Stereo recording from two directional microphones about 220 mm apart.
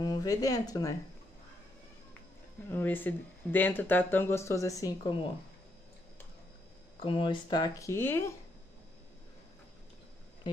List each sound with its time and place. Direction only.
0.0 s speech: 15° left (ahead or behind)
2.7 s speech: 10° left (ahead or behind)
7.0 s speech: 25° left (ahead or behind)